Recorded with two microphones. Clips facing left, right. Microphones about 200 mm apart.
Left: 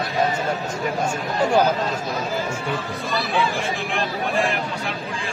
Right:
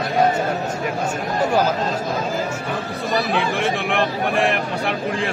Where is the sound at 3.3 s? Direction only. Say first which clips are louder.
Right 2 dB; 65° right (ahead or behind).